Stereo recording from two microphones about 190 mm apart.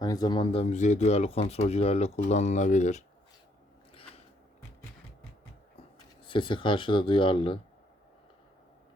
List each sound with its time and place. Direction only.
0.0 s speech: 20° left (ahead or behind); by 3.0 s 40° left (ahead or behind)
6.2 s speech: 25° left (ahead or behind)